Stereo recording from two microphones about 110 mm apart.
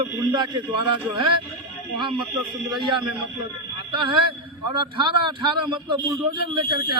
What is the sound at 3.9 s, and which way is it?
A man's voice, 50° right (ahead or behind).